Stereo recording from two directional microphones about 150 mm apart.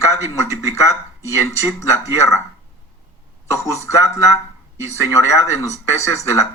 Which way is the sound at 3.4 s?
20° left (ahead or behind).